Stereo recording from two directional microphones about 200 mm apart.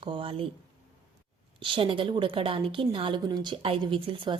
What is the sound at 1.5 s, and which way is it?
A woman's voice, 25° right (ahead or behind).